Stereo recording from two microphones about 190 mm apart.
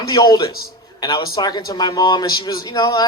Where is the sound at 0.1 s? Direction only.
20° left (ahead or behind).